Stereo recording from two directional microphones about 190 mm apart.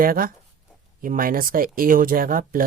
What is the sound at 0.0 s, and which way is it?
Speech, 50° right (ahead or behind).